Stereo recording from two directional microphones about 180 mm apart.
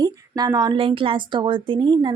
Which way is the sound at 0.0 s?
20° right (ahead or behind).